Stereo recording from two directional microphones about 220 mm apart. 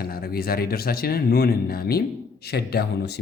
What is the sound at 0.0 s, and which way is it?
Speech, 45° left (ahead or behind).